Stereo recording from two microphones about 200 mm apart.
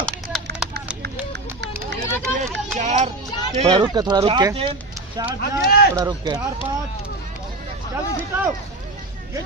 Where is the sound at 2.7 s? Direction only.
35° right (ahead or behind).